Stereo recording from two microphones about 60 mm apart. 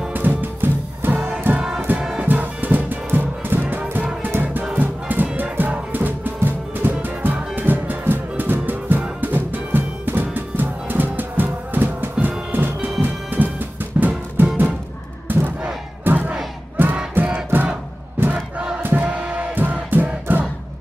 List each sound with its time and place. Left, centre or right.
0.1 s music: right
2.0 s music: centre
2.2 s music: right
15.2 s a sound: right
16.8 s music: right
18.3 s crowd: centre
18.8 s music: right
19.0 s music: centre
19.5 s music: right